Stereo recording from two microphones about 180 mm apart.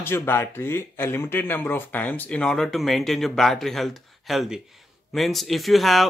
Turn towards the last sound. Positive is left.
turn(degrees=0)  # may be behind; listen again after turning